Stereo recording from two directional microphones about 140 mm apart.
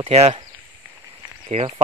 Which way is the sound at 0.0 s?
50° right (ahead or behind).